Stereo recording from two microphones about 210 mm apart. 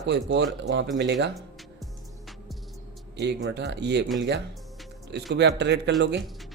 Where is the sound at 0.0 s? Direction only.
55° right (ahead or behind).